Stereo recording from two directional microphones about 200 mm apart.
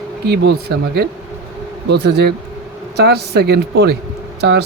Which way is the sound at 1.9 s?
55° right (ahead or behind).